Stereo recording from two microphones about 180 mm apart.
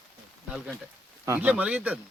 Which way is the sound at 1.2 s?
10° right (ahead or behind).